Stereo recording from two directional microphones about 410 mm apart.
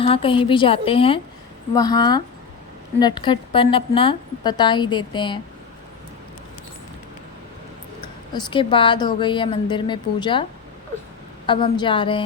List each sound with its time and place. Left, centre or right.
0.0 s a woman's voice: centre
8.0 s a woman's voice: centre
11.4 s a woman's voice: centre